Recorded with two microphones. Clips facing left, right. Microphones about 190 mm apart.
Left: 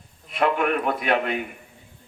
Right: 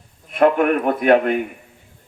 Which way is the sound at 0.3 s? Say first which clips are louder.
Right 7 dB; 50° right (ahead or behind).